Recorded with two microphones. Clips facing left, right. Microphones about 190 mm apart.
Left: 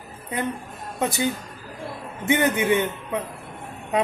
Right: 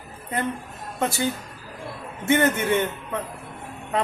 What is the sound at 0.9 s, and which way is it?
Speech, 15° left (ahead or behind).